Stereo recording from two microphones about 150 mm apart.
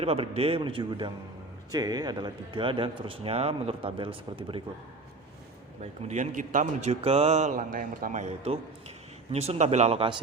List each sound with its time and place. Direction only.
0.0 s a man's voice: 40° right (ahead or behind)
5.8 s speech: 50° right (ahead or behind)
7.0 s speech: 40° right (ahead or behind)